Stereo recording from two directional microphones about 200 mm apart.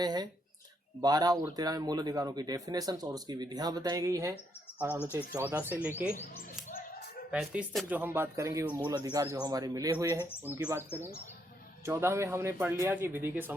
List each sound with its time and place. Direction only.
0.0 s a man's voice: 20° right (ahead or behind)
7.3 s a man's voice: 5° right (ahead or behind)